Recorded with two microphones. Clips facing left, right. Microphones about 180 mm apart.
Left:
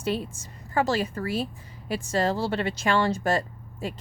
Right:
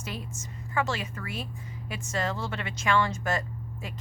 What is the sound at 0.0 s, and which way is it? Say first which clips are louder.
A woman's voice: left 9 dB; 30° left (ahead or behind).